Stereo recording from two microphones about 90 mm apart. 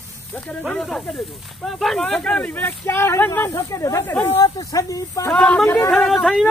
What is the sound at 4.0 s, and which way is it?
Speech, 25° left (ahead or behind).